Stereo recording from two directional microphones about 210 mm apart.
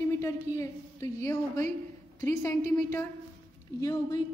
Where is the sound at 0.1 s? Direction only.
15° left (ahead or behind).